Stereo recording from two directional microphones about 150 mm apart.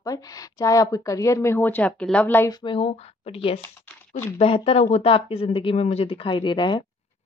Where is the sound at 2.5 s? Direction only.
30° left (ahead or behind).